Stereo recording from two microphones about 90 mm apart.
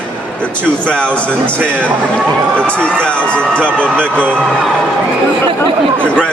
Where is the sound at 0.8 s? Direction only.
10° left (ahead or behind).